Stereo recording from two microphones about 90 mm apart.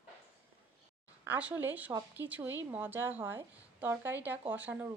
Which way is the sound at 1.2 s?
15° right (ahead or behind).